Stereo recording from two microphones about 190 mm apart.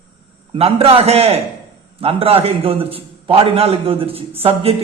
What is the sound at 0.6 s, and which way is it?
A man's voice, 30° right (ahead or behind).